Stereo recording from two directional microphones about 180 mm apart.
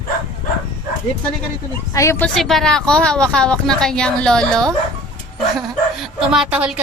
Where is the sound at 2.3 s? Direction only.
Centre (ahead or behind).